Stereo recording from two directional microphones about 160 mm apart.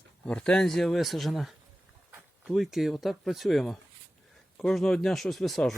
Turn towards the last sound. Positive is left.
turn(degrees=0)  # may be behind; listen again after turning